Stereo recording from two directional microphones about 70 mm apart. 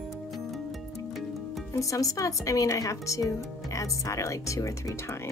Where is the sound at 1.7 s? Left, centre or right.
Left.